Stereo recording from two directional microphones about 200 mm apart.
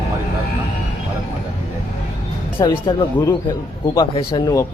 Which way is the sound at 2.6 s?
25° left (ahead or behind).